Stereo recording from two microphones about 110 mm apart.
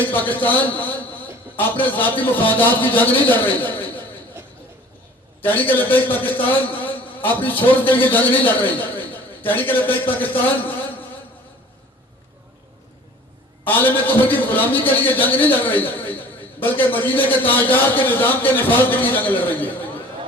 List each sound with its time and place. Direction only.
0.1 s a man's voice: 15° left (ahead or behind)
5.4 s a man's voice: 20° left (ahead or behind)
13.7 s a man's voice: 15° left (ahead or behind)